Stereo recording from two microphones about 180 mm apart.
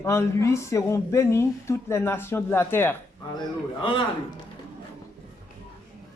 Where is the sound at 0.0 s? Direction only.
15° left (ahead or behind).